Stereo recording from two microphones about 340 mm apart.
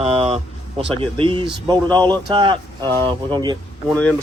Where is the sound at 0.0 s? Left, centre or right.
Centre.